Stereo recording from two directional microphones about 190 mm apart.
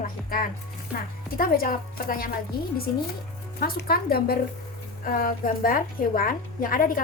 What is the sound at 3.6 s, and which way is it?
A woman's voice, 50° left (ahead or behind).